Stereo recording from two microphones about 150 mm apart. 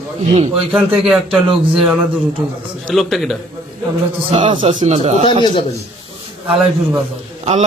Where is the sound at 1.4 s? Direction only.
35° right (ahead or behind).